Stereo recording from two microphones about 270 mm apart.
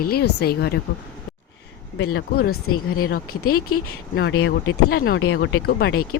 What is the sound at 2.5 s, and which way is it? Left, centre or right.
Speech, left.